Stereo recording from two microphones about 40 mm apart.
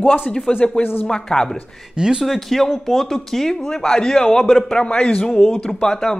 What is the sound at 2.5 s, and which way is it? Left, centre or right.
Speech, centre.